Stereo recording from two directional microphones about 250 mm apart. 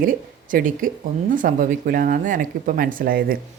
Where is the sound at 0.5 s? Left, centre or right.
Right.